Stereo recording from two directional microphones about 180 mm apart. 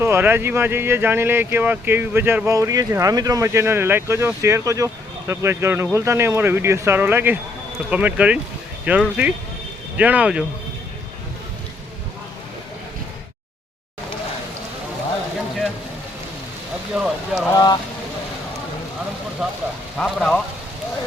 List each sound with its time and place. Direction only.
0.0 s speech: 10° right (ahead or behind)
16.9 s a sound: 5° right (ahead or behind)
17.4 s speech: 20° left (ahead or behind)
20.0 s speech: 5° left (ahead or behind)